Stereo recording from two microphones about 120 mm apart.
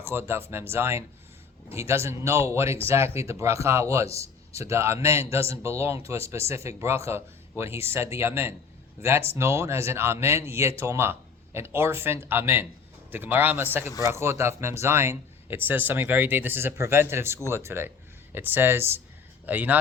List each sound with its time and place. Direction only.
0.0 s a man's voice: 20° right (ahead or behind)